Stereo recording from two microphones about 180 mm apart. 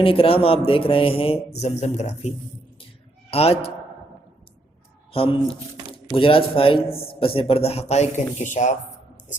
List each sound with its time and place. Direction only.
0.0 s a man's voice: 30° left (ahead or behind)
5.1 s a man's voice: 30° left (ahead or behind)